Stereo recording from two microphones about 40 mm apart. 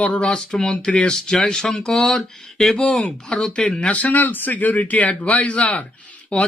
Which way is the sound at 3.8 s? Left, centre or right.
Left.